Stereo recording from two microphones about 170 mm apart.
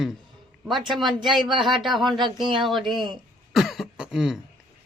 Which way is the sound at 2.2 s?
25° right (ahead or behind).